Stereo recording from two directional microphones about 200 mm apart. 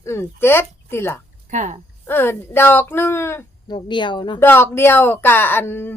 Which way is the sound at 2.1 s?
10° left (ahead or behind).